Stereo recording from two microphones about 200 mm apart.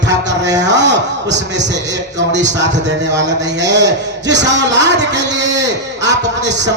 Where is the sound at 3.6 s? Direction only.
60° right (ahead or behind).